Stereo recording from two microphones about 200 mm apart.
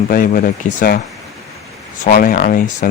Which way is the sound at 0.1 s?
45° left (ahead or behind).